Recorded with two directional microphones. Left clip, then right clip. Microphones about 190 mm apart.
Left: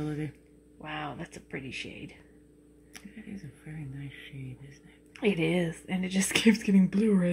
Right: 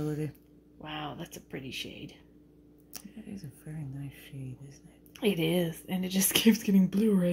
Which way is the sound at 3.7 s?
25° right (ahead or behind).